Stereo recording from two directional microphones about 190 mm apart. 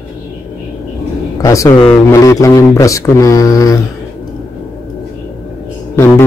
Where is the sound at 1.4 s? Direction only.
15° left (ahead or behind).